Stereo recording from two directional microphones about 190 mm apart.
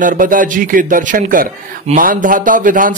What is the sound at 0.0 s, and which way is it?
A man's voice, 45° right (ahead or behind).